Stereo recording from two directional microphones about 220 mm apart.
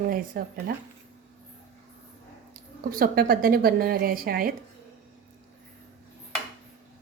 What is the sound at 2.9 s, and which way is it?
A woman's voice, 40° right (ahead or behind).